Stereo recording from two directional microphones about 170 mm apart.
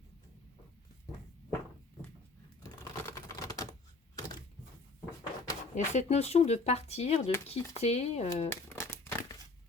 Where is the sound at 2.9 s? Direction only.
20° left (ahead or behind).